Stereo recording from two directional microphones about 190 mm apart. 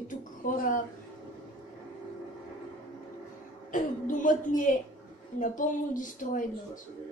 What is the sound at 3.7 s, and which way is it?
Speech, 45° left (ahead or behind).